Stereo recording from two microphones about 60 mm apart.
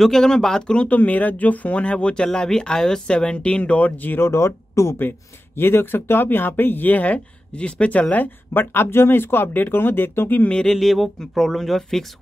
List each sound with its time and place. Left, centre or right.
0.0 s speech: centre; by 4.3 s left
4.3 s speech: left
10.7 s speech: centre